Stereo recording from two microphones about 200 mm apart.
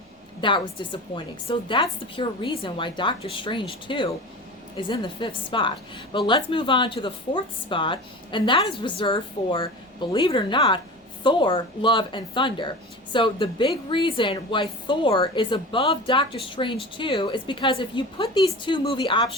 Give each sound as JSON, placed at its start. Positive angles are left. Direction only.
{"t": 0.4, "sound": "a woman's voice", "side_deg": 25}